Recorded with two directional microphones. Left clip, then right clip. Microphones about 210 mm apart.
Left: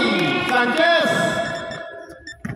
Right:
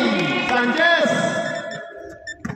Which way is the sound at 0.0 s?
40° left (ahead or behind).